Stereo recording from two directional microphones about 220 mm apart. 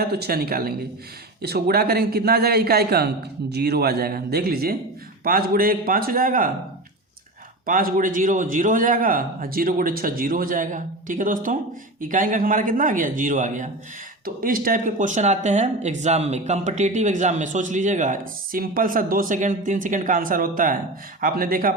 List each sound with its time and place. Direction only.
0.0 s a man's voice: 45° right (ahead or behind)
7.6 s speech: 40° right (ahead or behind)